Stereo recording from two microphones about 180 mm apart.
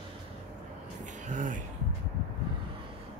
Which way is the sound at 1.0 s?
45° right (ahead or behind).